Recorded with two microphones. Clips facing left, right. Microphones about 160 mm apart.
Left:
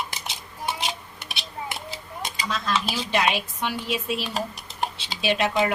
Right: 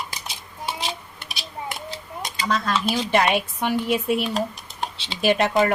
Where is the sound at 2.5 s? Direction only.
55° right (ahead or behind).